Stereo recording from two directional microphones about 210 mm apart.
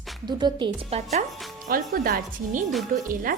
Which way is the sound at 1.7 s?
45° right (ahead or behind).